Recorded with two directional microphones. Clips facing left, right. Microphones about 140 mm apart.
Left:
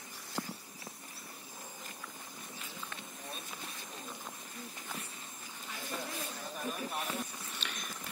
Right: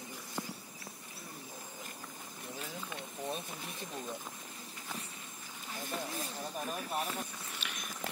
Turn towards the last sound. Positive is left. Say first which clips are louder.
# left 1 dB
turn(degrees=-10)  # may be behind; listen again after turning